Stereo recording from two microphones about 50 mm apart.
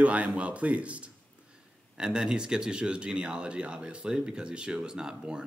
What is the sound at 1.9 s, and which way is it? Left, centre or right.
Speech, centre.